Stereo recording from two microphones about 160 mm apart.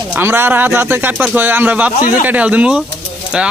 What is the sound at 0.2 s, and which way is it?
A man's voice, 15° right (ahead or behind).